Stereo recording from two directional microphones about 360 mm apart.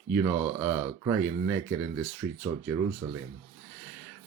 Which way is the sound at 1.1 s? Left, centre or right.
Centre.